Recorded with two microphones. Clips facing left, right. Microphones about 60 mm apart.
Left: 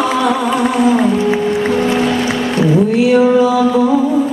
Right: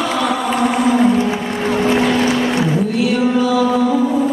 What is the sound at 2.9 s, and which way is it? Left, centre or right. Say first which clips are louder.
Music: left 6 dB; left.